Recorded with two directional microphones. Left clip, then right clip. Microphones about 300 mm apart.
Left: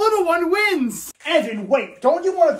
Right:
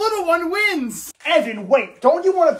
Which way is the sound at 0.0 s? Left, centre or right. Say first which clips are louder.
Left 1 dB; centre.